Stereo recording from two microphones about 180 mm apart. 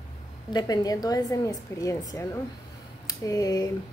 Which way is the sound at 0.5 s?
20° left (ahead or behind).